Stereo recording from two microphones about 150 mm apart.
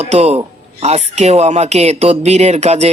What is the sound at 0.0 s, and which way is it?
Speech, 45° right (ahead or behind).